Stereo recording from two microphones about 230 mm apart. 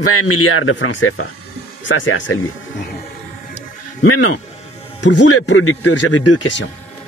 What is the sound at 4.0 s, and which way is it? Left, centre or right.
Speech, left.